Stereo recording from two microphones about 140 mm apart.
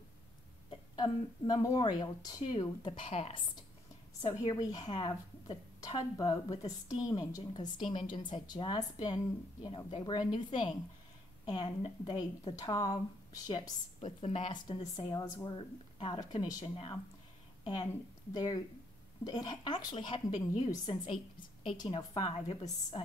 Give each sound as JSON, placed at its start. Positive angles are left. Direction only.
{"t": 0.7, "sound": "a woman's voice", "side_deg": 35}
{"t": 4.5, "sound": "a woman's voice", "side_deg": 30}
{"t": 16.6, "sound": "speech", "side_deg": 40}
{"t": 18.3, "sound": "a woman's voice", "side_deg": 25}